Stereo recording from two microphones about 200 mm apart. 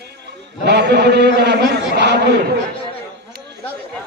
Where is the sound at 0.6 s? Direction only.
55° right (ahead or behind).